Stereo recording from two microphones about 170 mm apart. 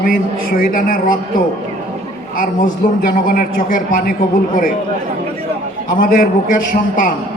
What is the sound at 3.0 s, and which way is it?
A man's voice, 55° left (ahead or behind).